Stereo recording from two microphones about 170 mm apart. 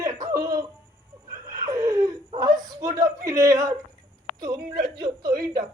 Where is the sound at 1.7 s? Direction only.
20° right (ahead or behind).